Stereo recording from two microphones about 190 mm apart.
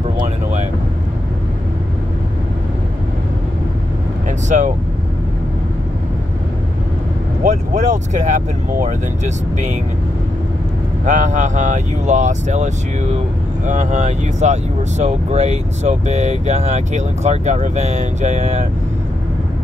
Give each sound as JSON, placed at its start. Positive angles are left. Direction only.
{"t": 4.3, "sound": "vehicle", "side_deg": -40}
{"t": 7.4, "sound": "speech", "side_deg": -40}
{"t": 11.1, "sound": "speech", "side_deg": -40}